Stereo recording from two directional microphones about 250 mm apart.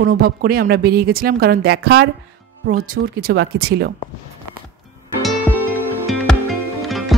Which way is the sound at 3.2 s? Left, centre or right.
Right.